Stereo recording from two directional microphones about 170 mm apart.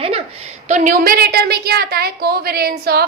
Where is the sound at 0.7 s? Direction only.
55° right (ahead or behind).